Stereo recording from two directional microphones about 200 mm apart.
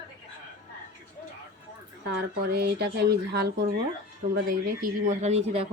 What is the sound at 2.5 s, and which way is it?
Speech, 55° right (ahead or behind).